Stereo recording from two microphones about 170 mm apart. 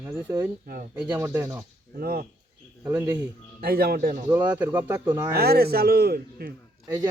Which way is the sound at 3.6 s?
60° right (ahead or behind).